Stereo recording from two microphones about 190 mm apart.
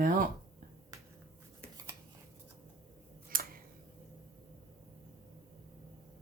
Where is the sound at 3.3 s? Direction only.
50° right (ahead or behind).